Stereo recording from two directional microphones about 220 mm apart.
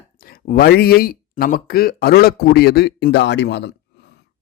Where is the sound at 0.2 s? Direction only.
40° left (ahead or behind).